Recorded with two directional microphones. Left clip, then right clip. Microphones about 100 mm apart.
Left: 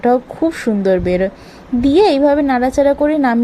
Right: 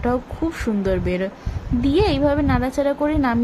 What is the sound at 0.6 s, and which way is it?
A woman's voice, 30° left (ahead or behind).